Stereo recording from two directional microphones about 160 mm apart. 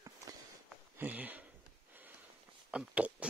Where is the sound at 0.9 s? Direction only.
10° right (ahead or behind).